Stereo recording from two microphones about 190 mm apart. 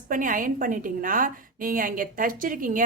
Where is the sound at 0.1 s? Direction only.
45° right (ahead or behind).